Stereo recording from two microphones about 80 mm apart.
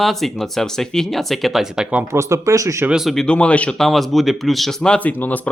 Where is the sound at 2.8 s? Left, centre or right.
Centre.